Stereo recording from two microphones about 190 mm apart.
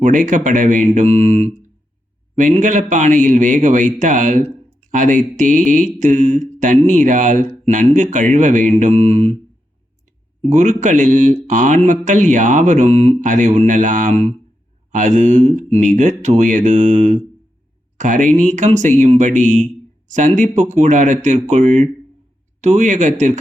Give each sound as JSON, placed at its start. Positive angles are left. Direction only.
{"t": 0.0, "sound": "a man's voice", "side_deg": -40}
{"t": 10.5, "sound": "a man's voice", "side_deg": -40}